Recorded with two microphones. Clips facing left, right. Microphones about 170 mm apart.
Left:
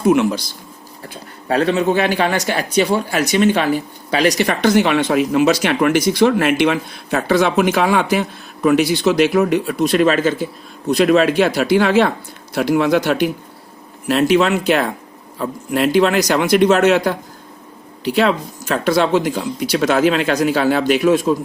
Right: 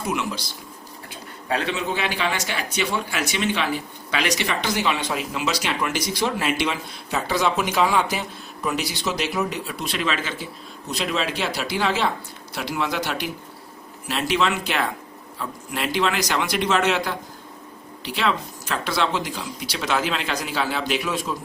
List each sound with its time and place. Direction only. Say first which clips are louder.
0.1 s speech: left 13 dB; 50° left (ahead or behind)
1.5 s speech: left 9 dB; 40° left (ahead or behind)